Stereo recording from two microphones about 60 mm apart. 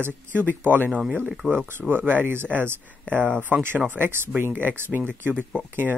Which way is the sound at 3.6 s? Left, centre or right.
Right.